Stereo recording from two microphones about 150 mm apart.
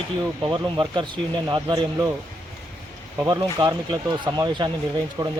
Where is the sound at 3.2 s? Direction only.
30° right (ahead or behind).